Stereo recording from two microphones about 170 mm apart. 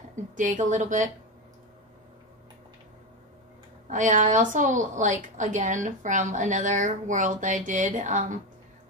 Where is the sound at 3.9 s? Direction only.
50° right (ahead or behind).